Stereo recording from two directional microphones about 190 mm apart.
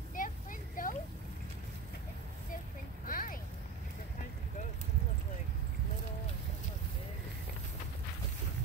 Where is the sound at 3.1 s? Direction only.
50° left (ahead or behind).